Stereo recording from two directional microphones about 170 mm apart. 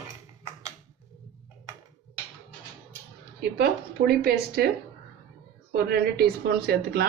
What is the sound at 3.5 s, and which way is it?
A woman's voice, 70° right (ahead or behind).